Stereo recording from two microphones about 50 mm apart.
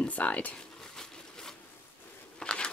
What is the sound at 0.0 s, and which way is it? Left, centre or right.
Speech, left.